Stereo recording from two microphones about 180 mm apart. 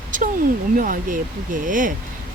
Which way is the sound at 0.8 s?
50° right (ahead or behind).